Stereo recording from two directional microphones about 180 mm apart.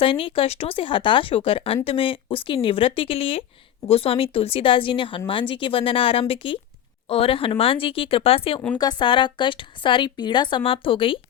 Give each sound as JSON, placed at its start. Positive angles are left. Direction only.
{"t": 0.0, "sound": "speech", "side_deg": 30}